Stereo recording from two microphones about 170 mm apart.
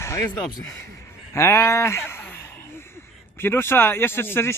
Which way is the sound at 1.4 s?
15° left (ahead or behind).